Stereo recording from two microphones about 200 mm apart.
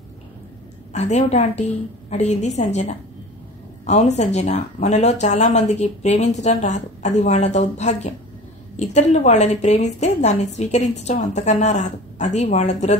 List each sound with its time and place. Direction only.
0.9 s a woman's voice: 35° left (ahead or behind)